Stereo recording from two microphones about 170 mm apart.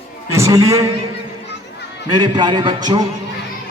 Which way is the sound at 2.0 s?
25° right (ahead or behind).